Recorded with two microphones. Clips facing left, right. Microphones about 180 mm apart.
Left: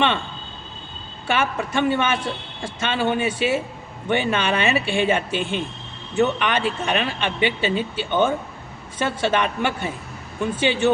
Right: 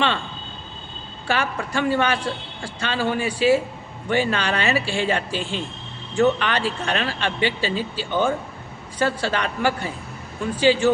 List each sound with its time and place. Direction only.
1.3 s speech: 20° left (ahead or behind)